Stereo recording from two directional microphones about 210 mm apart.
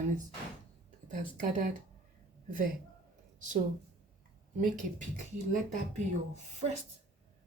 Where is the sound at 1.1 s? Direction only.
40° right (ahead or behind).